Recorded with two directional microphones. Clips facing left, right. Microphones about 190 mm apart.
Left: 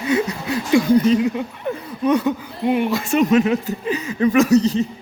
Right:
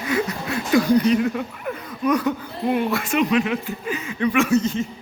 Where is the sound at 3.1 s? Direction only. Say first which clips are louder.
Left 5 dB; 40° left (ahead or behind).